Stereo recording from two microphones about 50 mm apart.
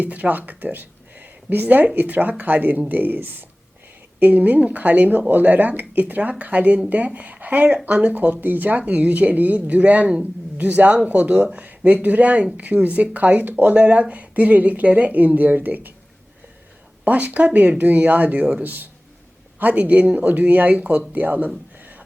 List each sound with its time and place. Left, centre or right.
0.0 s speech: right
17.0 s speech: right